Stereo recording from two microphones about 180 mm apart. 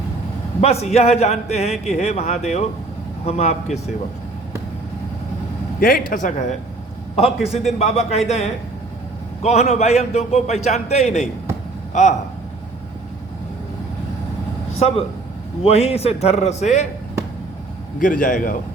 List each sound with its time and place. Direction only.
0.6 s a man's voice: 35° left (ahead or behind)
5.8 s a man's voice: 50° left (ahead or behind); by 8.2 s 35° left (ahead or behind)
9.4 s a man's voice: 40° left (ahead or behind)
14.8 s a man's voice: 35° left (ahead or behind)
18.0 s speech: 50° left (ahead or behind)